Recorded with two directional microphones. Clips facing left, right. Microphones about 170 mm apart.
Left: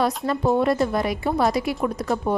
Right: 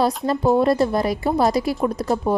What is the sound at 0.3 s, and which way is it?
A woman's voice, 35° right (ahead or behind).